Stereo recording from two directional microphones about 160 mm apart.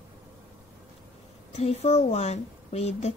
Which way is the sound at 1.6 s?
40° left (ahead or behind).